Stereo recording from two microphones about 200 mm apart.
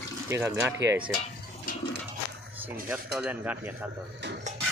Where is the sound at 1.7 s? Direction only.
40° left (ahead or behind).